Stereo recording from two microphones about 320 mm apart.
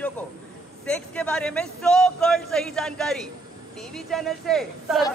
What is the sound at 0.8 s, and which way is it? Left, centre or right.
Speech, centre.